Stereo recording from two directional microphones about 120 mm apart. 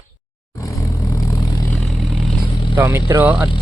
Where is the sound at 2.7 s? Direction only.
20° right (ahead or behind).